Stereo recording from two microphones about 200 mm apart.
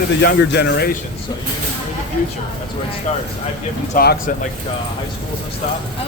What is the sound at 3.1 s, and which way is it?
Speech, 35° left (ahead or behind).